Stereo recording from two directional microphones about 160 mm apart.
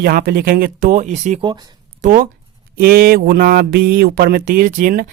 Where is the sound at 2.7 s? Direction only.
65° right (ahead or behind).